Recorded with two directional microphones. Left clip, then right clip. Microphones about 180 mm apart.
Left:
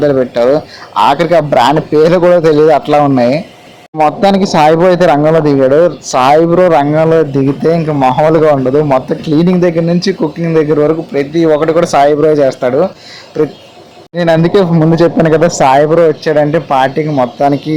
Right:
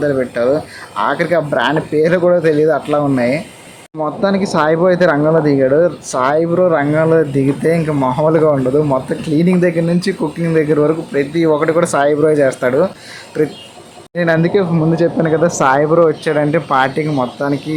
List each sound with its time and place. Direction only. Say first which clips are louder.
0.0 s speech: left 6 dB; 20° left (ahead or behind); by 12.9 s 5° left (ahead or behind)
14.2 s speech: left 5 dB; 20° left (ahead or behind)